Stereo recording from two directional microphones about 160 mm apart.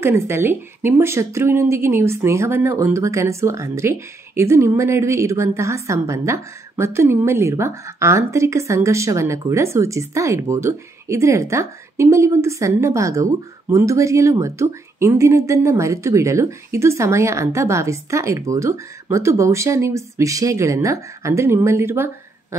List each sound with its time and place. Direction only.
0.0 s a woman's voice: 15° right (ahead or behind)